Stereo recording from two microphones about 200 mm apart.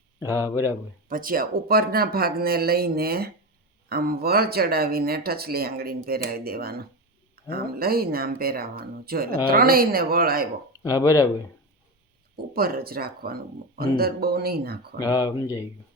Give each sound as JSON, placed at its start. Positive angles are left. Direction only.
{"t": 0.4, "sound": "speech", "side_deg": -10}
{"t": 1.0, "sound": "speech", "side_deg": -45}
{"t": 10.8, "sound": "speech", "side_deg": 15}
{"t": 12.5, "sound": "speech", "side_deg": -50}
{"t": 14.9, "sound": "speech", "side_deg": 20}